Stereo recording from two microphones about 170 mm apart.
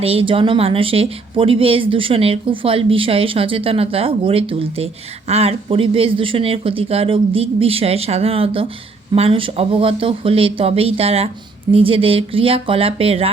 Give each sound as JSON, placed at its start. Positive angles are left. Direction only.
{"t": 0.0, "sound": "speech", "side_deg": -35}